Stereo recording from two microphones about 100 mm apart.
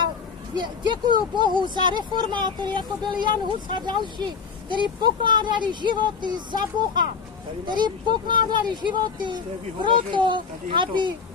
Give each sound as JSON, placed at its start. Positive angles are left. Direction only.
{"t": 0.6, "sound": "speech", "side_deg": -50}